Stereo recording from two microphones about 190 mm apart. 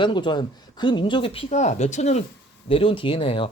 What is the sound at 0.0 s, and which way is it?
Speech, 25° left (ahead or behind).